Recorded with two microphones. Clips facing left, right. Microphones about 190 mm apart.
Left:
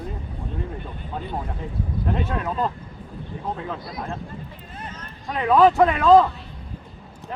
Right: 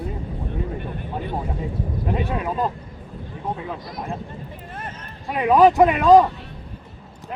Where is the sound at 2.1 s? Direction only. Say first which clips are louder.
Right 2 dB; 10° right (ahead or behind).